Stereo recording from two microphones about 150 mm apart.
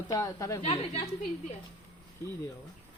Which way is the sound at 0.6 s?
40° left (ahead or behind).